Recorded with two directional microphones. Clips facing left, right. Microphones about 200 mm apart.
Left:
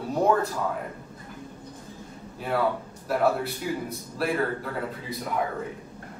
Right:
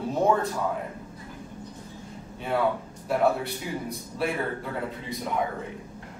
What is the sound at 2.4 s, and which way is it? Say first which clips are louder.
A man's voice: even; centre (ahead or behind).